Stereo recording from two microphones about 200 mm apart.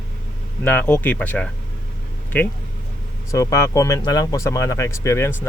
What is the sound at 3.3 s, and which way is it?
Speech, 15° left (ahead or behind).